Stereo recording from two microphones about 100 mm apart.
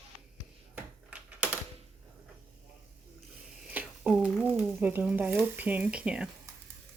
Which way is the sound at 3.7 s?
15° right (ahead or behind).